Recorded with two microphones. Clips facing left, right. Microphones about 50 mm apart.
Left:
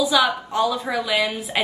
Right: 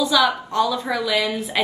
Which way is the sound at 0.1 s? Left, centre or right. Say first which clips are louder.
Right 1 dB; centre.